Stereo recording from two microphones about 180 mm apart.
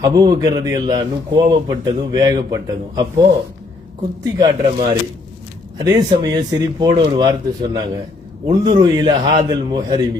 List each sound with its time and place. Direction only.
0.1 s a man's voice: 20° right (ahead or behind)